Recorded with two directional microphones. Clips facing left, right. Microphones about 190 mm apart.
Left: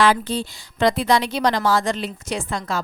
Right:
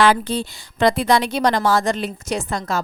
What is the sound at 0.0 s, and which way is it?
A woman's voice, 60° right (ahead or behind).